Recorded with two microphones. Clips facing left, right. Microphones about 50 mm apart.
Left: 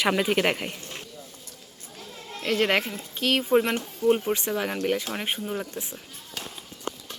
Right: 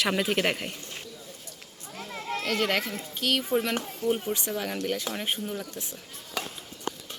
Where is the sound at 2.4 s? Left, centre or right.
Left.